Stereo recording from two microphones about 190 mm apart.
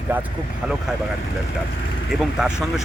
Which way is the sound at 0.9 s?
5° right (ahead or behind).